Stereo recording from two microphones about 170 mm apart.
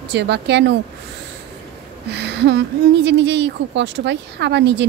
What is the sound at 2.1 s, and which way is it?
A woman's voice, 85° right.